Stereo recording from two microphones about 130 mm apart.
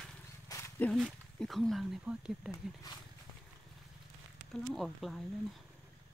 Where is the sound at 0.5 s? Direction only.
25° left (ahead or behind).